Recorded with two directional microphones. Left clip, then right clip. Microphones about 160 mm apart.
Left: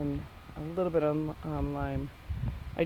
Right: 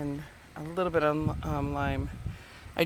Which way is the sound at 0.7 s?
5° right (ahead or behind).